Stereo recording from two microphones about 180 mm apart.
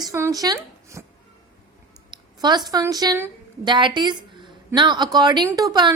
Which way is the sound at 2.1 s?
25° right (ahead or behind).